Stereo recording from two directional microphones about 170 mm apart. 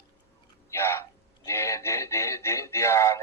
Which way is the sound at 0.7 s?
15° left (ahead or behind).